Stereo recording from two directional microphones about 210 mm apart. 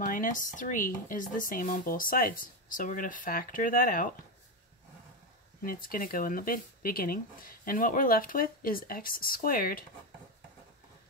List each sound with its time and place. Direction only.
0.0 s speech: 40° left (ahead or behind)
5.6 s speech: 40° left (ahead or behind)